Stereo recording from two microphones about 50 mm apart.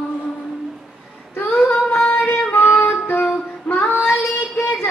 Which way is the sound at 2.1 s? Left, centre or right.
Left.